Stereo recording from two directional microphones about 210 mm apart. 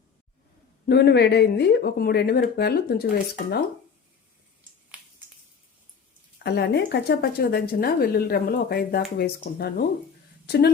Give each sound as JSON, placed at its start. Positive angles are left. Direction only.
{"t": 0.9, "sound": "speech", "side_deg": 50}
{"t": 4.9, "sound": "a sound", "side_deg": -5}
{"t": 6.4, "sound": "speech", "side_deg": 55}